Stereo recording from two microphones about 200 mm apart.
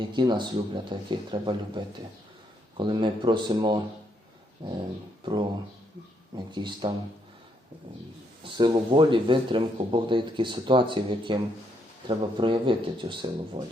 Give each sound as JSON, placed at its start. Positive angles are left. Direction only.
{"t": 0.0, "sound": "speech", "side_deg": -20}
{"t": 8.5, "sound": "speech", "side_deg": -20}